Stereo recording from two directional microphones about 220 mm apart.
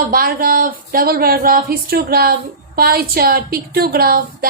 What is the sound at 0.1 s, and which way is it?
A woman's voice, 40° right (ahead or behind).